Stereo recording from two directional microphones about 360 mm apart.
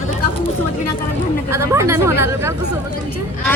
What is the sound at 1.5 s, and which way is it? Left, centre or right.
Speech, centre.